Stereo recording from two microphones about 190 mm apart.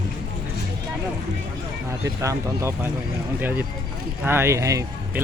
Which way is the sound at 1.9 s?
15° right (ahead or behind).